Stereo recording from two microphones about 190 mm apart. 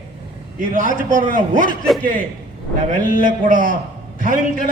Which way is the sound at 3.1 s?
45° right (ahead or behind).